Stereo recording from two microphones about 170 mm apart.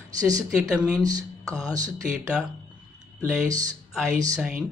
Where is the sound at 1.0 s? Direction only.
20° right (ahead or behind).